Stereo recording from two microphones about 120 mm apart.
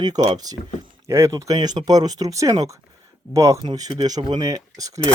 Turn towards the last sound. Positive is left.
turn(degrees=-30)  # may be behind; listen again after turning